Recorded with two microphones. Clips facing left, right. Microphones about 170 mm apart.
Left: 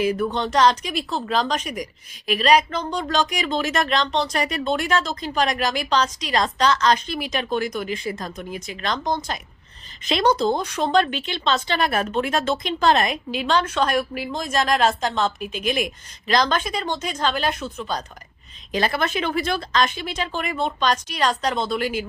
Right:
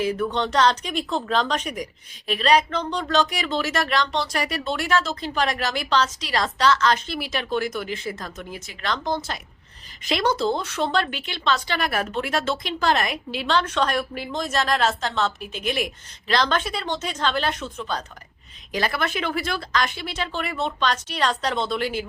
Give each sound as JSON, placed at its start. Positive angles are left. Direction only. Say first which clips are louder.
{"t": 0.0, "sound": "speech", "louder": "left 2 dB", "side_deg": 10}
{"t": 18.7, "sound": "speech", "louder": "left 3 dB", "side_deg": 20}